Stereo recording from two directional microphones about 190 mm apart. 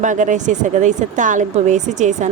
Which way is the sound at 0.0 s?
40° right (ahead or behind).